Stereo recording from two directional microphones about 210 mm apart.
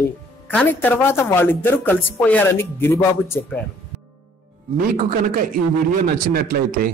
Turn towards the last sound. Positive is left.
turn(degrees=-45)  # may be behind; listen again after turning